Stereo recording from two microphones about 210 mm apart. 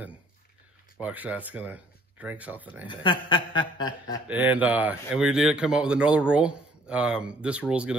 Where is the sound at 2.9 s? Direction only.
25° left (ahead or behind).